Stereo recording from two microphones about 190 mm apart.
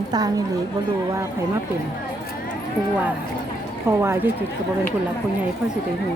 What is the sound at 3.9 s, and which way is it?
Speech, 15° right (ahead or behind).